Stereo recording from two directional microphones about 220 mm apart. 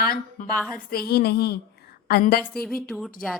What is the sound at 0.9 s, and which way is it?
A woman's voice, 45° left (ahead or behind).